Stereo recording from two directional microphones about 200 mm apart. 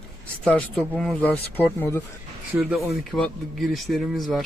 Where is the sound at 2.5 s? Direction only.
Centre (ahead or behind).